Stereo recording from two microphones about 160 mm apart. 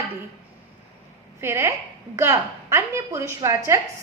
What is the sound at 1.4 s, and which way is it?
A woman's voice, 15° right (ahead or behind).